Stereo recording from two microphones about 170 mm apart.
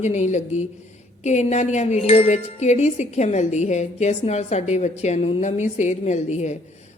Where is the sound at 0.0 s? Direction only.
45° left (ahead or behind).